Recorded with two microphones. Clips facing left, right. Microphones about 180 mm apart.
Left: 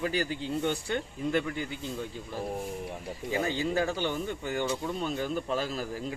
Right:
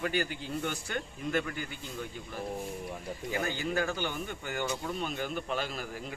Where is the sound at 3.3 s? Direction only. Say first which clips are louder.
Left 4 dB; 30° left (ahead or behind).